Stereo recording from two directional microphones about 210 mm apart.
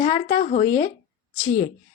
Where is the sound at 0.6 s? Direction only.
15° left (ahead or behind).